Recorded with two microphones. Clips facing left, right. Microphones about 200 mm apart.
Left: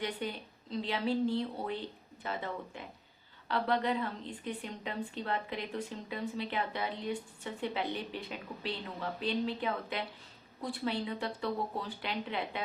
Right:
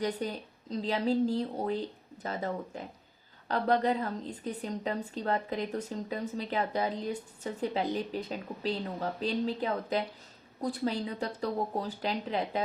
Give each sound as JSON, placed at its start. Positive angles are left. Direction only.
{"t": 0.0, "sound": "a woman's voice", "side_deg": -40}